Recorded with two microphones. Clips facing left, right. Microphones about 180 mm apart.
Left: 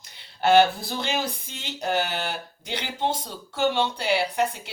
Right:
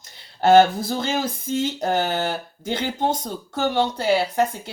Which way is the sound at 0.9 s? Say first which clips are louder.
Right 4 dB; 45° right (ahead or behind).